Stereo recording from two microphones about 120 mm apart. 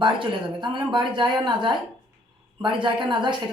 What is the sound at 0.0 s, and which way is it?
Speech, 45° right (ahead or behind).